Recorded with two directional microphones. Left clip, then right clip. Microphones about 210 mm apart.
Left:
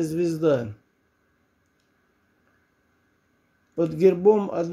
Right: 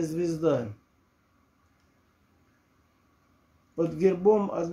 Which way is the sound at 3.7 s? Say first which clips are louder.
Left 5 dB; 25° left (ahead or behind).